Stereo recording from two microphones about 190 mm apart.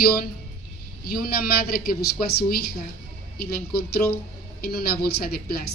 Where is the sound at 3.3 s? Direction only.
55° left (ahead or behind).